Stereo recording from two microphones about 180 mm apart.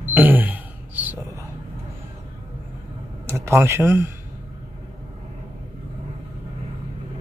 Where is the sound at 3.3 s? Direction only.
15° right (ahead or behind).